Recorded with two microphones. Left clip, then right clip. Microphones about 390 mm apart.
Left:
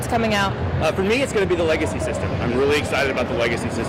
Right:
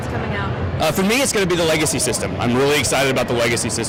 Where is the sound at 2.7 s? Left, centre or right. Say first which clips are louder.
Right 3 dB; right.